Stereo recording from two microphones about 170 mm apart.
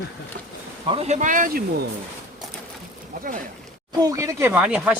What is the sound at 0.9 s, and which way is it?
Speech, 40° right (ahead or behind).